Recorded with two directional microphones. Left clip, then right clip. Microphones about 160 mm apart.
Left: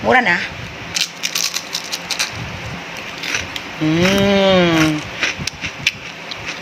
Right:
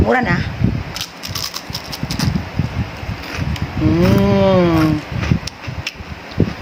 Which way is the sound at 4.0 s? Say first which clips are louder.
Left 2 dB; 20° right (ahead or behind).